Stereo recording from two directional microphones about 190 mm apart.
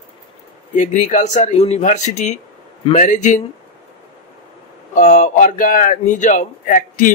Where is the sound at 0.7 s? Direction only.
40° left (ahead or behind).